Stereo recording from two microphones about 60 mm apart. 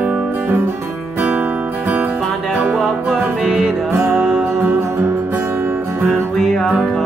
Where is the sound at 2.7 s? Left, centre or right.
Centre.